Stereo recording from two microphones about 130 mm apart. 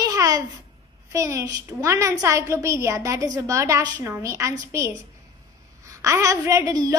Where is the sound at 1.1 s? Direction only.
25° right (ahead or behind).